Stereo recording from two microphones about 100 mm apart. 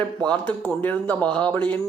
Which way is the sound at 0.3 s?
20° left (ahead or behind).